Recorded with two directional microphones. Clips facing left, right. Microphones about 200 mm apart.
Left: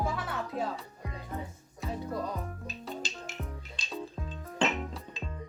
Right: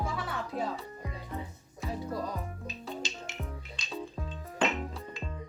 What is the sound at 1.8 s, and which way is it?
Music, centre (ahead or behind).